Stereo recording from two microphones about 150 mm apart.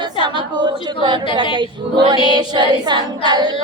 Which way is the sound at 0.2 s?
30° right (ahead or behind).